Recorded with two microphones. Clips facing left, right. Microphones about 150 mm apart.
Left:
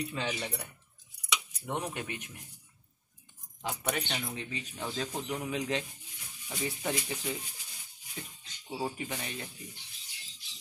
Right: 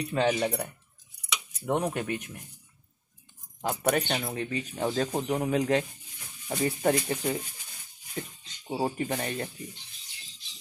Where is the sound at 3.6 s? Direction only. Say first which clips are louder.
Right 8 dB; 50° right (ahead or behind).